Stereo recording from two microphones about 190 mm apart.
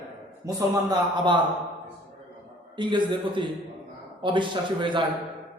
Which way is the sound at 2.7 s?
25° right (ahead or behind).